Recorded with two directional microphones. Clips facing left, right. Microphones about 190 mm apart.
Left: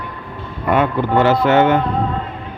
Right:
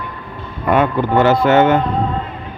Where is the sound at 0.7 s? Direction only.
45° right (ahead or behind).